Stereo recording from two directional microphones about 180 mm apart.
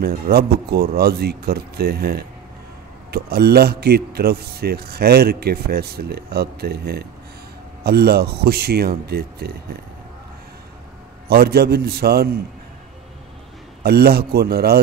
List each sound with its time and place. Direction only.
0.0 s a man's voice: 60° right (ahead or behind)
11.2 s a man's voice: 60° right (ahead or behind)
13.8 s a man's voice: 60° right (ahead or behind)